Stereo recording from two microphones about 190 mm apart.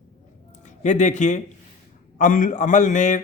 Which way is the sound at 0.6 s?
40° left (ahead or behind).